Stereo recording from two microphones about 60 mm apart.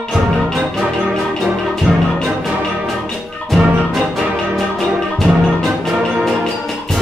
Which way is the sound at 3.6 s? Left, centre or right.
Centre.